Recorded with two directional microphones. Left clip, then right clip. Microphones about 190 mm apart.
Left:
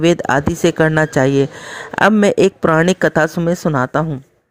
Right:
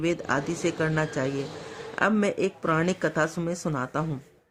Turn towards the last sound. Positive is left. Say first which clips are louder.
# left 13 dB
turn(degrees=45)  # may be behind; listen again after turning